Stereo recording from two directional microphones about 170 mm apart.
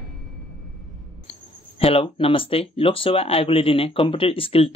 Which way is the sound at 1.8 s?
35° left (ahead or behind).